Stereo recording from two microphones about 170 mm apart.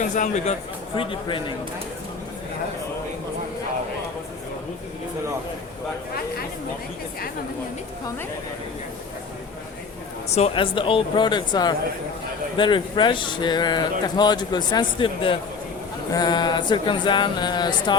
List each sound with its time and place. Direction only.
0.2 s a man's voice: 40° left (ahead or behind)
0.9 s a man's voice: 30° left (ahead or behind)
10.3 s speech: 35° left (ahead or behind)